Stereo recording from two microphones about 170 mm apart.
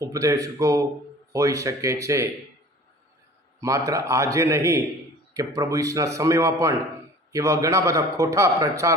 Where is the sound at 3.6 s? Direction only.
20° right (ahead or behind).